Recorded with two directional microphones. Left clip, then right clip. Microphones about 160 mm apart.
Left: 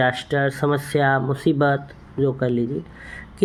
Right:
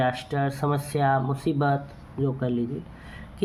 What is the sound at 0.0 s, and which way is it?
A woman's voice, 40° left (ahead or behind).